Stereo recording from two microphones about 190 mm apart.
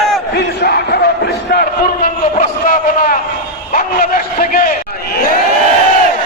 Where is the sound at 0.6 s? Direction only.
55° left (ahead or behind).